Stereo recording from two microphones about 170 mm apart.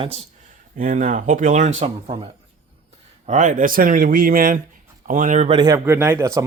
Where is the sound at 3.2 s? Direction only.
45° right (ahead or behind).